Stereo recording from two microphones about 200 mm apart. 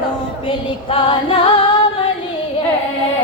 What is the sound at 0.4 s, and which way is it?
Female singing, 25° left (ahead or behind).